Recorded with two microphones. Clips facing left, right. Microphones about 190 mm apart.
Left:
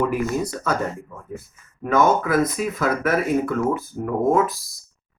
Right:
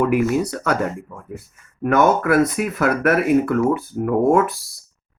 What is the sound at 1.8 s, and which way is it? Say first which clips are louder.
Speech: right 2 dB; 70° right (ahead or behind).